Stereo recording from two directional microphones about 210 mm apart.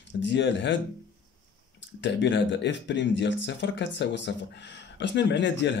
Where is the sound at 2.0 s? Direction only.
60° left (ahead or behind).